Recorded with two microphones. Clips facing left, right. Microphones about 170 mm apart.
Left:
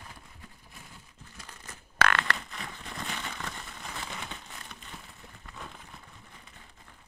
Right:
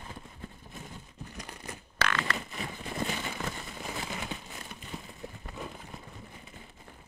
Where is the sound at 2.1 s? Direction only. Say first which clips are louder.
Left 1 dB; 65° left (ahead or behind).